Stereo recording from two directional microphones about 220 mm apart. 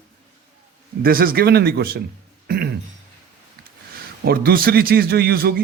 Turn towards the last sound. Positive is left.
turn(degrees=-45)  # may be behind; listen again after turning